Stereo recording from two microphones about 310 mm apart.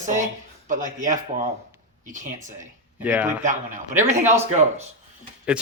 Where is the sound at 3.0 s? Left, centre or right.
Centre.